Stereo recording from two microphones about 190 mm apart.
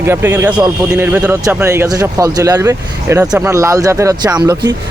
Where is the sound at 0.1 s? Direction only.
10° right (ahead or behind).